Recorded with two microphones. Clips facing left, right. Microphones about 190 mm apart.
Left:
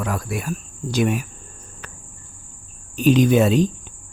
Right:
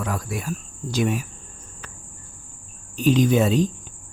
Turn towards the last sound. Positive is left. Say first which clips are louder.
# left 3 dB
turn(degrees=65)  # may be behind; listen again after turning